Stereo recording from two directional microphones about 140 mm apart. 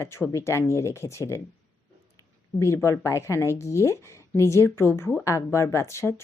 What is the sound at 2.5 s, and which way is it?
Speech, 20° left (ahead or behind).